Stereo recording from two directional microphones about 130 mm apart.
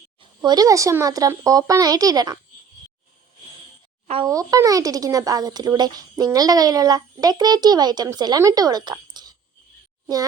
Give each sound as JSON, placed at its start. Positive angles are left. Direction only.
{"t": 0.2, "sound": "speech", "side_deg": -30}
{"t": 4.0, "sound": "speech", "side_deg": -45}
{"t": 4.3, "sound": "speech", "side_deg": -25}